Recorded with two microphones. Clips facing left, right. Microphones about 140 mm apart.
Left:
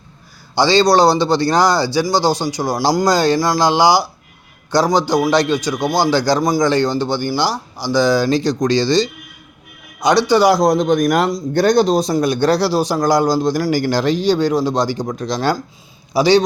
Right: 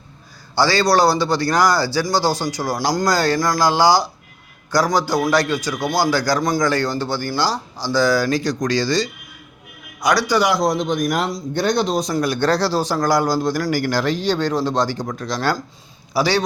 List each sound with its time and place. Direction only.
0.5 s a man's voice: 20° left (ahead or behind)
12.1 s a man's voice: 20° left (ahead or behind)